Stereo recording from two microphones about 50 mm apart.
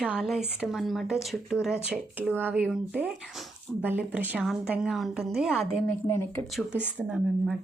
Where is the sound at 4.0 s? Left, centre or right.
Right.